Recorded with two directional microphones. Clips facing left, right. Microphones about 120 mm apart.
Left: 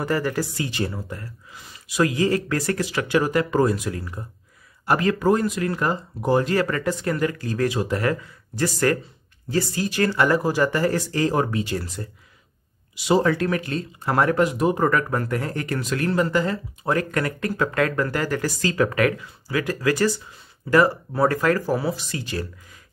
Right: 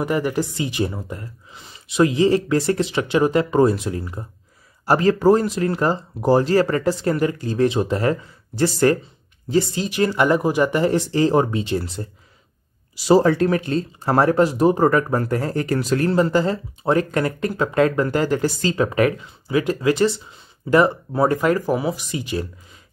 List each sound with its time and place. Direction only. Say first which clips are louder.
0.0 s speech: right 3 dB; 15° right (ahead or behind)